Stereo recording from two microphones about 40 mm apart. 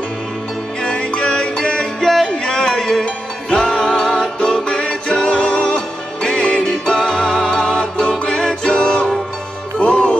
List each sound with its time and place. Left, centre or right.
0.8 s music: left